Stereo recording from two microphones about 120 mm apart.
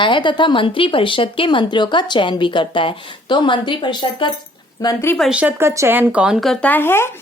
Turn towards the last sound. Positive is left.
turn(degrees=20)  # may be behind; listen again after turning